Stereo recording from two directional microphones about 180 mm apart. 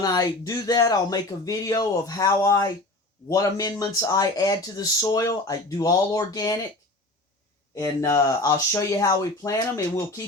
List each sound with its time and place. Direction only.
0.0 s speech: 20° left (ahead or behind)
7.8 s speech: 15° left (ahead or behind)